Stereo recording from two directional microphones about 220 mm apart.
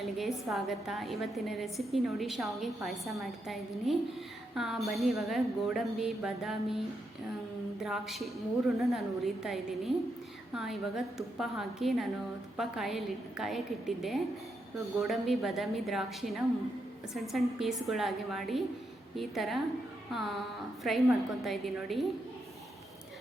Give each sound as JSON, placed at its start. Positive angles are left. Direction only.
{"t": 0.0, "sound": "a woman's voice", "side_deg": 0}